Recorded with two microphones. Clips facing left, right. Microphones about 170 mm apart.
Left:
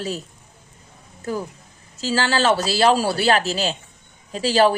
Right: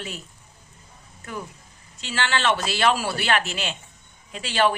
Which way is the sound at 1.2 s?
35° left (ahead or behind).